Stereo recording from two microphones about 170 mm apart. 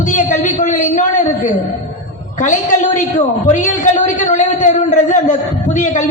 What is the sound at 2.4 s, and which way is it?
A woman's voice, 45° left (ahead or behind).